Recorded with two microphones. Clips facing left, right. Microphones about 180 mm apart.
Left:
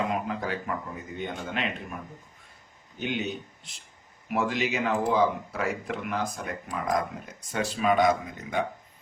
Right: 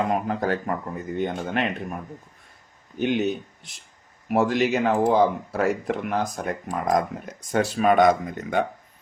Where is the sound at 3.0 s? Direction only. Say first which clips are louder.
Right 8 dB; 55° right (ahead or behind).